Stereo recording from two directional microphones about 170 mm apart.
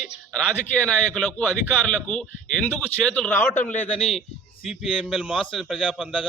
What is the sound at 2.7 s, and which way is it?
Speech, 5° left (ahead or behind).